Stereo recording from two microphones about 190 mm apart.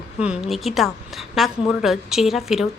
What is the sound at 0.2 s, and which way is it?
A woman's voice, 5° right (ahead or behind).